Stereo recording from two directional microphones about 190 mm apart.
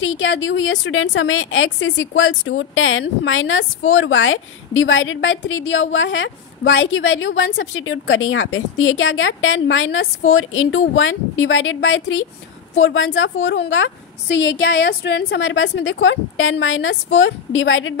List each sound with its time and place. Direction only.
0.0 s a woman's voice: 85° left